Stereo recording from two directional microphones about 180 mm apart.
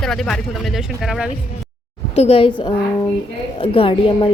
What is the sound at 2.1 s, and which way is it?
A woman's voice, 35° left (ahead or behind).